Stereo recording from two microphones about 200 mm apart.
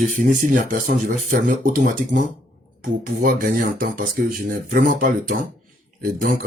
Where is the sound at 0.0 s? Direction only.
40° right (ahead or behind).